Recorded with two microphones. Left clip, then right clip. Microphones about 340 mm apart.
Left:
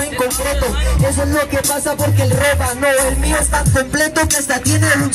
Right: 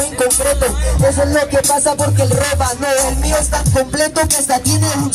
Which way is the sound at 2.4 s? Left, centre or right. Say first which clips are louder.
Left 2 dB; right.